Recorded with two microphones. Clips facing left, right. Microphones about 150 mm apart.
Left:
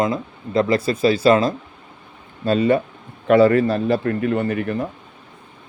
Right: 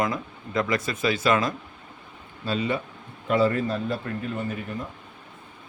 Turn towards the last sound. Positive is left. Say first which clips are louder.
# left 9 dB
turn(degrees=70)  # may be behind; listen again after turning